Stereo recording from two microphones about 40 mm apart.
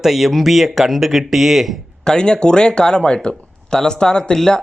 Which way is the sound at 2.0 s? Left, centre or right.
Centre.